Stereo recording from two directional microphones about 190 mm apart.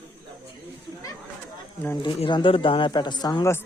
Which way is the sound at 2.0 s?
25° left (ahead or behind).